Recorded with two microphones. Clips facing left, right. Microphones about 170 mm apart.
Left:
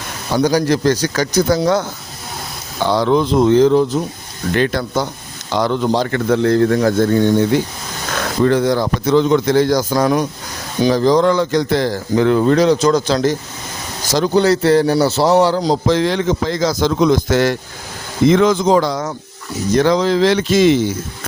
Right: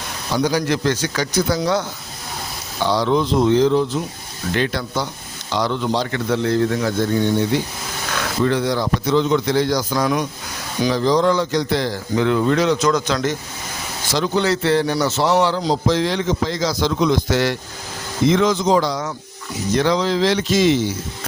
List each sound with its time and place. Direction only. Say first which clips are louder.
0.3 s speech: left 5 dB; 40° left (ahead or behind)
2.8 s a man's voice: left 3 dB; 55° left (ahead or behind)